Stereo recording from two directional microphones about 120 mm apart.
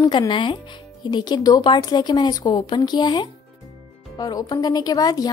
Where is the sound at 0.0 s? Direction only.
40° left (ahead or behind).